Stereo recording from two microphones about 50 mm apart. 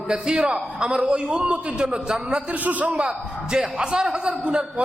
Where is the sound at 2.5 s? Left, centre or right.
Right.